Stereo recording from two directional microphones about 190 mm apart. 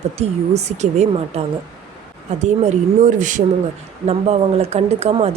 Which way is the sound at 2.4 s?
35° right (ahead or behind).